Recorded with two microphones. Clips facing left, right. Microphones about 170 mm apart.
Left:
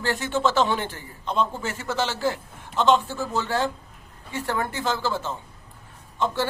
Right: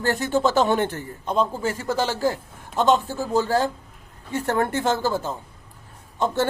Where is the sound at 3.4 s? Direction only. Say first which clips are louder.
Right 4 dB; 40° right (ahead or behind).